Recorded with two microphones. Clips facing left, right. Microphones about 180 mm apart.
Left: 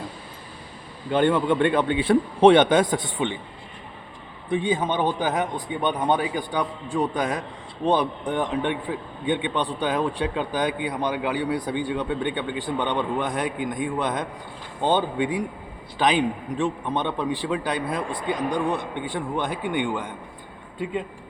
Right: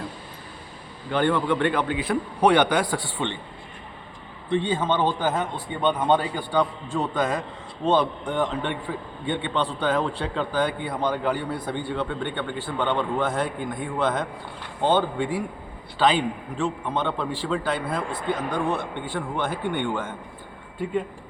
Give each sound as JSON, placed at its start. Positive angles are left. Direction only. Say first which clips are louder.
{"t": 1.1, "sound": "a man's voice", "louder": "left 2 dB", "side_deg": 20}
{"t": 4.4, "sound": "a man's voice", "louder": "even", "side_deg": 10}